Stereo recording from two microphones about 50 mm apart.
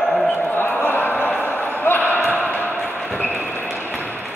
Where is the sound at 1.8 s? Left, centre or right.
Left.